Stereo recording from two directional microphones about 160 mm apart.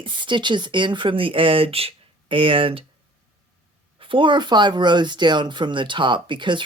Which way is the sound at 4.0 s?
30° right (ahead or behind).